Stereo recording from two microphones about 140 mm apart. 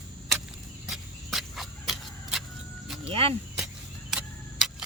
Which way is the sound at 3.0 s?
45° right (ahead or behind).